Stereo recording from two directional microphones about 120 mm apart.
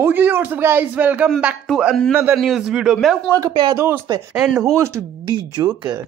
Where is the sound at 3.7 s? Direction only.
20° right (ahead or behind).